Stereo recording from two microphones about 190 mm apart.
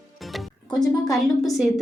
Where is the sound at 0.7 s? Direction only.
20° left (ahead or behind).